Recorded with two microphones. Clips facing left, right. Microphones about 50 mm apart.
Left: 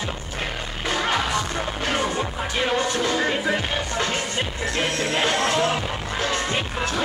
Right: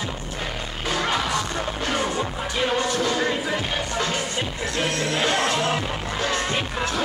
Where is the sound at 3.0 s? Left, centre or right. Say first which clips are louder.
Even; centre.